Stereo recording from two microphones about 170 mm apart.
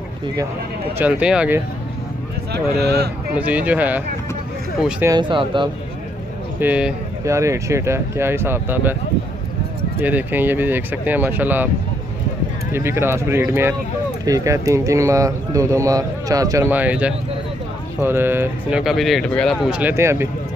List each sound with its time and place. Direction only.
0.9 s speech: 10° right (ahead or behind)
2.5 s speech: 70° right (ahead or behind)
3.3 s speech: 10° right (ahead or behind)
5.0 s speech: 25° right (ahead or behind)
6.6 s speech: 10° right (ahead or behind)
10.0 s speech: 10° right (ahead or behind)
12.7 s speech: 15° right (ahead or behind)